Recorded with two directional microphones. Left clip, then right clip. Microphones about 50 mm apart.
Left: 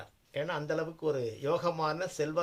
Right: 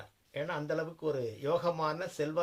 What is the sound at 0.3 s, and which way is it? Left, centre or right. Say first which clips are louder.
Speech: left 2 dB; left.